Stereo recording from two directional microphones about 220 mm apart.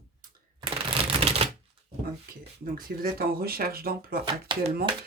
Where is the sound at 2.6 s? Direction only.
40° right (ahead or behind).